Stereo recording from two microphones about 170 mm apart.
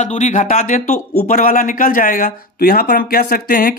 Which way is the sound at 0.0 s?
45° left (ahead or behind).